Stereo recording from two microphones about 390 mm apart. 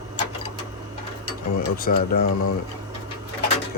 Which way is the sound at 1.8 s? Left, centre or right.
Left.